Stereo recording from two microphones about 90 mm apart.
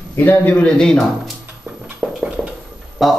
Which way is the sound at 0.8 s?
5° left (ahead or behind).